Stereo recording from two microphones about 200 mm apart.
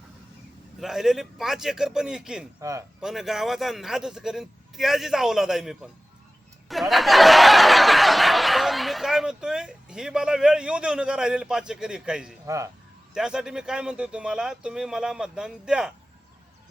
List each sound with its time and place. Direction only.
0.8 s a man's voice: centre (ahead or behind)
2.6 s speech: 15° right (ahead or behind)
3.0 s a man's voice: centre (ahead or behind)
6.7 s snicker: centre (ahead or behind)
12.5 s speech: 15° right (ahead or behind)
13.1 s a man's voice: 5° right (ahead or behind)